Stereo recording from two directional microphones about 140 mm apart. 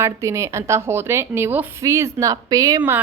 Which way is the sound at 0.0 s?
20° right (ahead or behind).